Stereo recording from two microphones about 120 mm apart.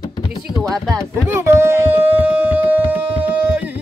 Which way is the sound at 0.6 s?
25° right (ahead or behind).